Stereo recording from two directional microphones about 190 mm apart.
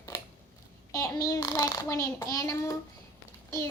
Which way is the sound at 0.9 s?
15° left (ahead or behind).